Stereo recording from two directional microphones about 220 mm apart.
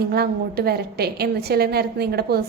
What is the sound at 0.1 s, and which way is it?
A woman's voice, 45° right (ahead or behind).